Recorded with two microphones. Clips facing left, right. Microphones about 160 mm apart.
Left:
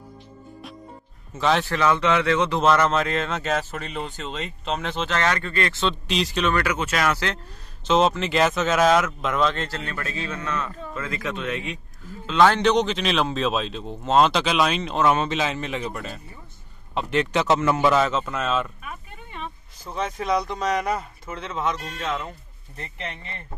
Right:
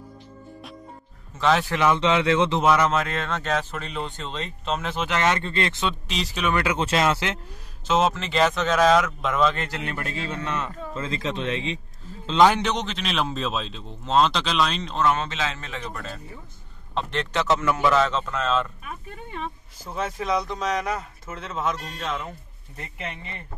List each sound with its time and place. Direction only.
1.4 s speech: centre (ahead or behind)
1.7 s a man's voice: 15° right (ahead or behind)
2.6 s speech: 10° right (ahead or behind)
5.9 s speech: centre (ahead or behind)
6.5 s a man's voice: 25° right (ahead or behind)
7.8 s speech: 5° right (ahead or behind)
9.7 s a man's voice: 15° right (ahead or behind)
12.3 s a man's voice: 15° right (ahead or behind)
12.6 s speech: centre (ahead or behind); by 18.0 s 20° left (ahead or behind)
18.0 s speech: 10° left (ahead or behind)
19.8 s speech: 5° right (ahead or behind)